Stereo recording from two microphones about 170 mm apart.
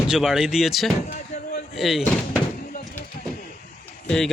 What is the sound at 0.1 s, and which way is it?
Speech, 5° right (ahead or behind).